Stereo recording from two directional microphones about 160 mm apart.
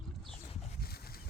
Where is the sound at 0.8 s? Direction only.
75° left (ahead or behind).